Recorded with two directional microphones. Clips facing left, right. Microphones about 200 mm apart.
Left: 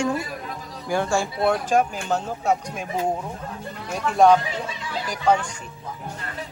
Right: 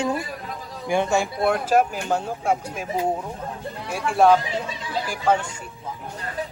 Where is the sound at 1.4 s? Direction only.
5° right (ahead or behind).